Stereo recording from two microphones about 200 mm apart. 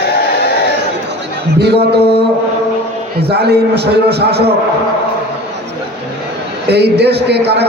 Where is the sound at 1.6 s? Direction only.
55° right (ahead or behind).